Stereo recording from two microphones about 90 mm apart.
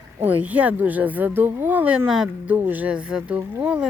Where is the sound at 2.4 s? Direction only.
20° right (ahead or behind).